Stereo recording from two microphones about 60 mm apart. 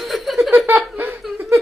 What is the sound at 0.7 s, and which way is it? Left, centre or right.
Laughter, right.